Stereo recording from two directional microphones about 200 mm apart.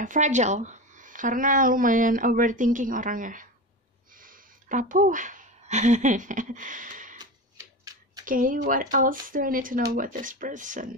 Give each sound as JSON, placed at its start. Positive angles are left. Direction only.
{"t": 0.0, "sound": "speech", "side_deg": -40}
{"t": 8.3, "sound": "speech", "side_deg": -40}